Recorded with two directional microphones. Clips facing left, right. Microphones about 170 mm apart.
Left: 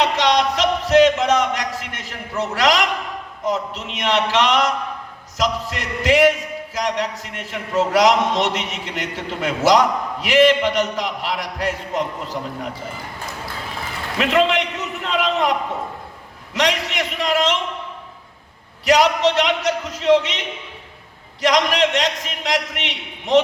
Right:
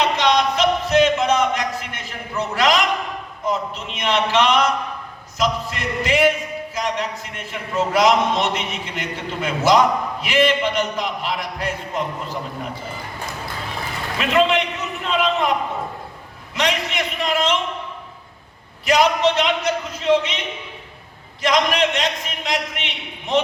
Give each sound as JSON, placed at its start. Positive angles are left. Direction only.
{"t": 0.0, "sound": "a sound", "side_deg": 90}
{"t": 2.4, "sound": "a man's voice", "side_deg": 90}
{"t": 14.2, "sound": "a man's voice", "side_deg": 80}
{"t": 16.6, "sound": "a man's voice", "side_deg": 90}
{"t": 18.9, "sound": "a man's voice", "side_deg": 90}
{"t": 21.4, "sound": "a man's voice", "side_deg": 90}